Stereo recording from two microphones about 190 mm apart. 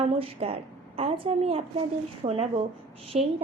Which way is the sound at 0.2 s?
30° right (ahead or behind).